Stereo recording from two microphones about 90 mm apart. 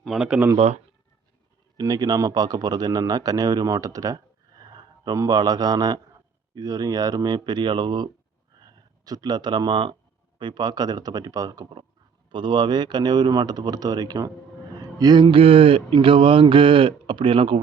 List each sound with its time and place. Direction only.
0.0 s speech: centre (ahead or behind)
0.3 s speech: 20° right (ahead or behind)
1.7 s a man's voice: 45° right (ahead or behind)
8.5 s a sound: 45° right (ahead or behind)
10.3 s speech: 60° right (ahead or behind); by 11.7 s 45° right (ahead or behind)
12.3 s a man's voice: 65° right (ahead or behind)
14.9 s a sound: 50° right (ahead or behind)
15.3 s speech: 85° right